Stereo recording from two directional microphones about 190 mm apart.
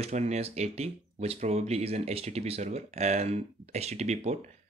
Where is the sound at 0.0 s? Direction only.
35° right (ahead or behind).